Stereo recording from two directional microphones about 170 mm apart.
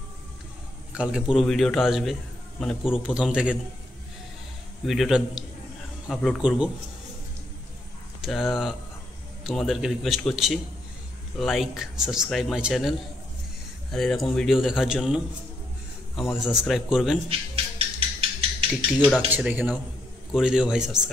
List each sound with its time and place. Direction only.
0.9 s a man's voice: 5° right (ahead or behind)
4.8 s a man's voice: centre (ahead or behind)
8.2 s a man's voice: centre (ahead or behind)
13.9 s a man's voice: centre (ahead or behind)
16.3 s a man's voice: 5° right (ahead or behind)
17.3 s a sound: 35° right (ahead or behind)
18.9 s a man's voice: 5° left (ahead or behind)
19.3 s a man's voice: 10° right (ahead or behind)